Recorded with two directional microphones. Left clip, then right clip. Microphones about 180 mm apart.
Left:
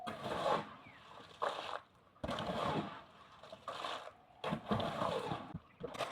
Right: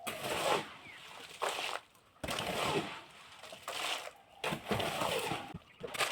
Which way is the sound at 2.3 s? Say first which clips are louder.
Right 4 dB; 40° right (ahead or behind).